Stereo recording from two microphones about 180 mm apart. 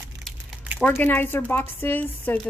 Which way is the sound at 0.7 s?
10° left (ahead or behind).